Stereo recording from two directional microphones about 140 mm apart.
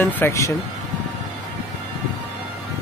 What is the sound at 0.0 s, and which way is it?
Speech, 20° left (ahead or behind).